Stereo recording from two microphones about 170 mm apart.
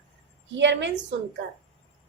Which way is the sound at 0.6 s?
90° right.